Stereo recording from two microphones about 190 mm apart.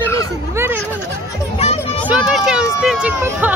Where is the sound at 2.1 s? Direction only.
5° right (ahead or behind).